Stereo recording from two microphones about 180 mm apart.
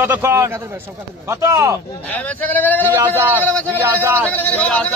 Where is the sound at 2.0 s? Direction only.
10° left (ahead or behind).